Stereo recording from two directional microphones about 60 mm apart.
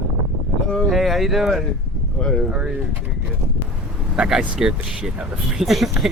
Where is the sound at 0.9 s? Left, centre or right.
Centre.